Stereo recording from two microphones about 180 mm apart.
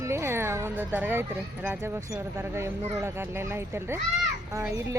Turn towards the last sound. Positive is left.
turn(degrees=-15)  # may be behind; listen again after turning